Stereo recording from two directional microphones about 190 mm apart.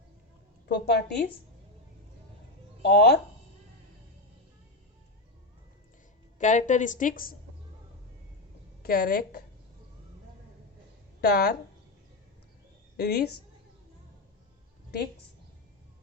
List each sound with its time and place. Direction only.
0.7 s a woman's voice: 60° left (ahead or behind)
2.8 s a woman's voice: 60° left (ahead or behind)
6.4 s a woman's voice: 40° left (ahead or behind)
8.8 s a woman's voice: 55° left (ahead or behind)
11.2 s a woman's voice: 60° left (ahead or behind)
13.0 s a woman's voice: 60° left (ahead or behind)